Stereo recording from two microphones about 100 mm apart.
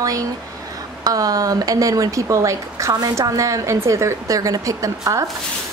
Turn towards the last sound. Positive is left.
turn(degrees=-35)  # may be behind; listen again after turning